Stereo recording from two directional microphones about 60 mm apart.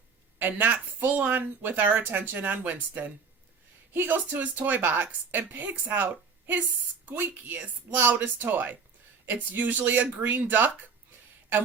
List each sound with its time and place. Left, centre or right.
0.3 s a woman's voice: right